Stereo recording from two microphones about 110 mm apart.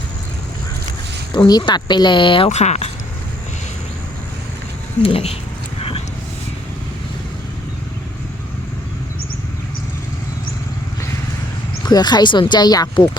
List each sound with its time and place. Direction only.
1.3 s speech: 40° left (ahead or behind)
2.5 s speech: 90° left
5.0 s speech: 60° left (ahead or behind)
11.9 s speech: 40° left (ahead or behind)